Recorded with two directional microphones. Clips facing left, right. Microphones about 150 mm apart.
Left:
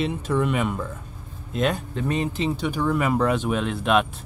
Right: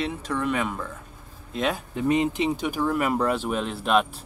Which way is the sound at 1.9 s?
15° right (ahead or behind).